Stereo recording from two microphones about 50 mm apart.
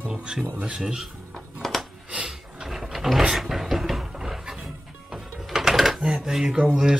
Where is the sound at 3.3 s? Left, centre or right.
Centre.